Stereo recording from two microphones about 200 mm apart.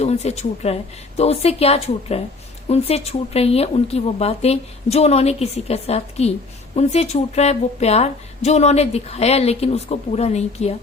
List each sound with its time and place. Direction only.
0.0 s a woman's voice: 35° left (ahead or behind)